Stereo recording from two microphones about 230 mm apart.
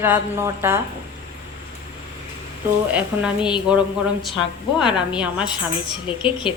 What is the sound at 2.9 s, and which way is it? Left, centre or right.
A woman's voice, centre.